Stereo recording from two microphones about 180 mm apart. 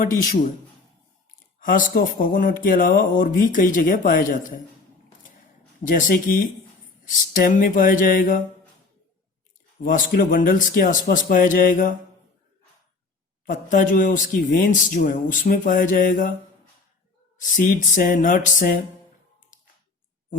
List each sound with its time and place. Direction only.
1.5 s speech: 50° left (ahead or behind)
5.8 s speech: 50° left (ahead or behind)
9.8 s speech: 50° left (ahead or behind)
13.5 s speech: 45° left (ahead or behind)
17.3 s speech: 45° left (ahead or behind)